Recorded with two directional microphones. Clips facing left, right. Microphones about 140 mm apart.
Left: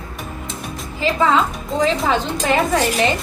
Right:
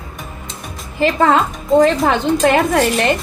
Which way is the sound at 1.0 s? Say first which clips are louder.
Right 3 dB; 55° right (ahead or behind).